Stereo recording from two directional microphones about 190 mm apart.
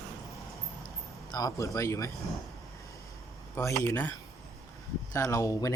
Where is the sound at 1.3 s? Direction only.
20° left (ahead or behind).